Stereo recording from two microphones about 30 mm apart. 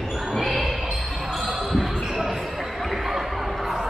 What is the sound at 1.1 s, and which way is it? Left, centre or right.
Basketball bounce, centre.